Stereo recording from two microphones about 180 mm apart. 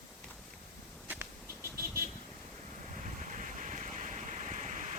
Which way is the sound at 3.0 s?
45° right (ahead or behind).